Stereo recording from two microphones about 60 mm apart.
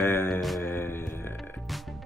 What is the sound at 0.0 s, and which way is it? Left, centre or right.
Mantra, left.